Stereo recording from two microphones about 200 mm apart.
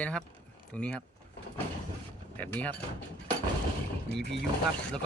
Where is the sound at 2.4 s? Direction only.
10° left (ahead or behind).